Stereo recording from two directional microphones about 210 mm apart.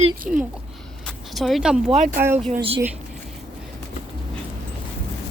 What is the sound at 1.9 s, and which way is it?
Speech, 40° right (ahead or behind).